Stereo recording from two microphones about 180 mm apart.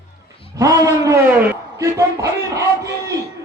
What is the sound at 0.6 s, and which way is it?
A man's voice, 20° right (ahead or behind).